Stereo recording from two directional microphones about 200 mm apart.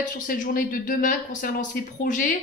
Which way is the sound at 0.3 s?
45° left (ahead or behind).